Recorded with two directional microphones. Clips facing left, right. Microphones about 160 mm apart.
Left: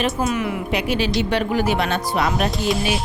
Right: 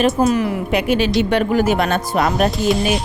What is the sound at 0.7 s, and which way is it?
A woman's voice, 50° right (ahead or behind).